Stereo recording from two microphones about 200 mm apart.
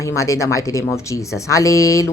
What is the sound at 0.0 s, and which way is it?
A woman's voice, 15° left (ahead or behind).